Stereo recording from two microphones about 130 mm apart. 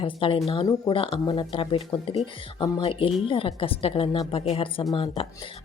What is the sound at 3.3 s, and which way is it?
A woman's voice, 45° left (ahead or behind).